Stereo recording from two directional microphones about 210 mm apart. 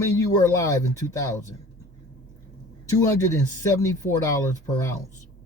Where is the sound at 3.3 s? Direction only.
15° left (ahead or behind).